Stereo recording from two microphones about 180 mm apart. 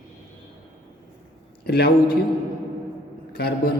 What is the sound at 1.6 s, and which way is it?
Speech, 60° left (ahead or behind).